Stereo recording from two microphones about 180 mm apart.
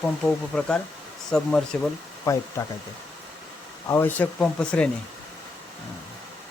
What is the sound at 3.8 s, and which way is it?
Speech, 15° left (ahead or behind).